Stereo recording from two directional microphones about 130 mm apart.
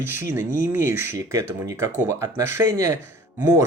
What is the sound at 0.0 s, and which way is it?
Speech, 20° right (ahead or behind).